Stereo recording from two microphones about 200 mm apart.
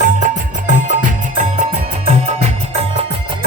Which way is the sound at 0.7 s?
40° right (ahead or behind).